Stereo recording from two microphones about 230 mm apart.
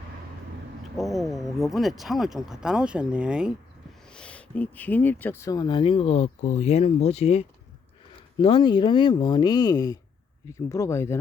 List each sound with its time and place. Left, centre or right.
0.9 s speech: centre